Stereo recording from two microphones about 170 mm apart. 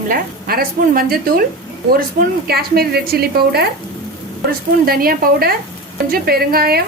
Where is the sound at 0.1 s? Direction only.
60° right (ahead or behind).